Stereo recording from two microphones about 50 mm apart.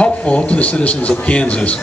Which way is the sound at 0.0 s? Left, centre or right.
Left.